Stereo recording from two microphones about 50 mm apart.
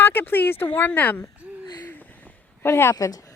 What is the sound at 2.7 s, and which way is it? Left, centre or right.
Speech, left.